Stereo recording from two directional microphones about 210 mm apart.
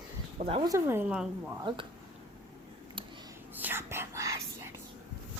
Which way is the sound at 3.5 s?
10° right (ahead or behind).